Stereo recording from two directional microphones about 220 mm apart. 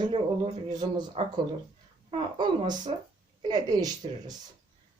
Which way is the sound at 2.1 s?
20° right (ahead or behind).